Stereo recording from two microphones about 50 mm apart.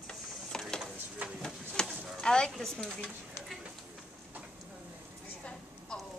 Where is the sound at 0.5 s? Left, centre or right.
Centre.